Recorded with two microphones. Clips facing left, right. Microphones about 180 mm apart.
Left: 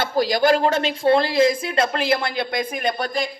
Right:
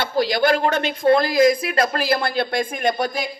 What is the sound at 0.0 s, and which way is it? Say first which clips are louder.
Speech: even; 40° left (ahead or behind).